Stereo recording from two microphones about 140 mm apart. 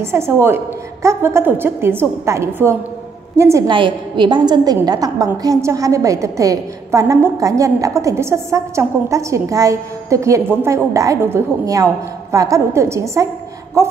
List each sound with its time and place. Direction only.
0.0 s a woman's voice: 15° right (ahead or behind)
3.6 s a woman's voice: 35° right (ahead or behind)